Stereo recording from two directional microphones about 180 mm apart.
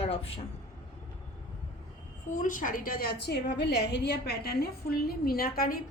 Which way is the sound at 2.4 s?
45° left (ahead or behind).